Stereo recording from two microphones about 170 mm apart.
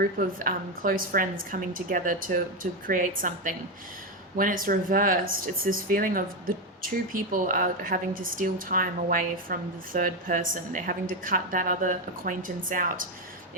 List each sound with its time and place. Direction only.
0.0 s a woman's voice: 55° right (ahead or behind)